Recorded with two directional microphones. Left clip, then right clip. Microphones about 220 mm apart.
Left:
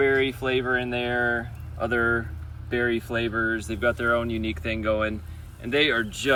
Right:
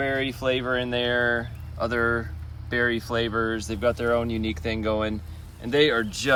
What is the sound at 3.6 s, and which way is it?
Speech, 15° right (ahead or behind).